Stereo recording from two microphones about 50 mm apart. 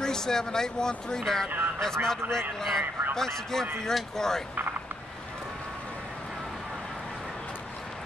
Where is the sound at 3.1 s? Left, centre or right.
Centre.